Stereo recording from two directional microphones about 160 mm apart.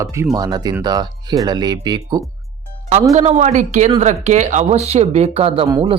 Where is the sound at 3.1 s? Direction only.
45° right (ahead or behind).